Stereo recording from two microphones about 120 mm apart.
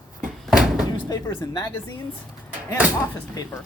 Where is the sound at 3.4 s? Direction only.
30° left (ahead or behind).